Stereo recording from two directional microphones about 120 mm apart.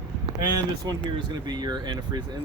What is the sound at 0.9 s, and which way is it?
Speech, 35° right (ahead or behind).